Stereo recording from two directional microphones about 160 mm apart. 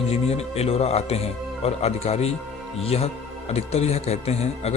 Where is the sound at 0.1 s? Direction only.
40° left (ahead or behind).